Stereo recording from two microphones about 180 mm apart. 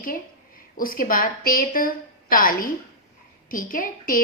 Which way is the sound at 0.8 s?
50° left (ahead or behind).